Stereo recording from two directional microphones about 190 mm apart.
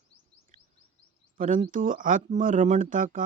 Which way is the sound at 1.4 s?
45° right (ahead or behind).